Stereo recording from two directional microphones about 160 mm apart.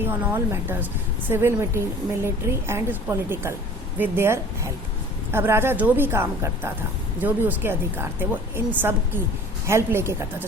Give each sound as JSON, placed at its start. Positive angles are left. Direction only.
{"t": 0.0, "sound": "a woman's voice", "side_deg": -15}